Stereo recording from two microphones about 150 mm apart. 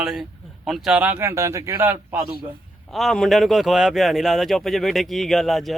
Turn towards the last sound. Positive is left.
turn(degrees=0)  # may be behind; listen again after turning